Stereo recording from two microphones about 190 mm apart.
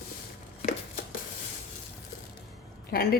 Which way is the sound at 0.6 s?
35° left (ahead or behind).